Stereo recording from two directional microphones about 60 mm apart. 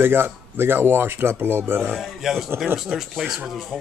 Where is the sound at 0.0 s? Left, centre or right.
Right.